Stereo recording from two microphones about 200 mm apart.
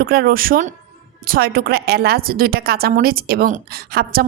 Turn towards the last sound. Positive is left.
turn(degrees=-50)  # may be behind; listen again after turning